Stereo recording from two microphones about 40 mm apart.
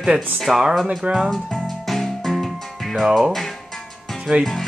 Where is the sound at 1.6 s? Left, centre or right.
Centre.